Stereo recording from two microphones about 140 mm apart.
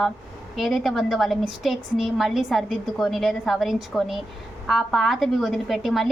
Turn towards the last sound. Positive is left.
turn(degrees=0)  # may be behind; listen again after turning